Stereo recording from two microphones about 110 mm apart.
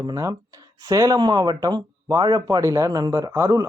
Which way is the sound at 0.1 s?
30° right (ahead or behind).